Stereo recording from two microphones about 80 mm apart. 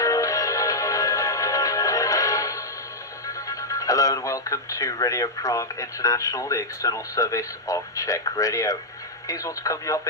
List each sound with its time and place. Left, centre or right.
0.0 s music: left
3.2 s speech: left